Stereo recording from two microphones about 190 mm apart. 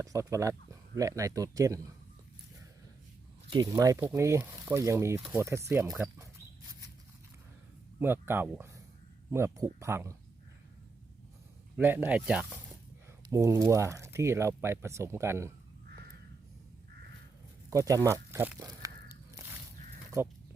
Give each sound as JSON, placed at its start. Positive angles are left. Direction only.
{"t": 0.0, "sound": "speech", "side_deg": -15}
{"t": 3.5, "sound": "speech", "side_deg": -20}
{"t": 7.9, "sound": "speech", "side_deg": -10}
{"t": 11.8, "sound": "speech", "side_deg": -10}
{"t": 17.7, "sound": "speech", "side_deg": -15}
{"t": 20.1, "sound": "speech", "side_deg": -15}